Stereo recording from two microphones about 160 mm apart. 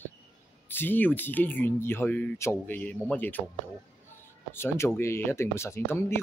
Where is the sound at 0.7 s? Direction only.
10° left (ahead or behind).